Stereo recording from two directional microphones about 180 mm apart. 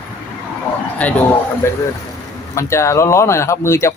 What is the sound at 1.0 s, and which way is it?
A man's voice, 5° left (ahead or behind).